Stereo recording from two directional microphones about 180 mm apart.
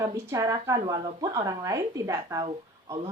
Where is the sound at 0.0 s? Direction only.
20° right (ahead or behind).